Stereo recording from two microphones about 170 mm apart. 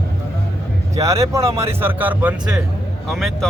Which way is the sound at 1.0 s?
20° right (ahead or behind).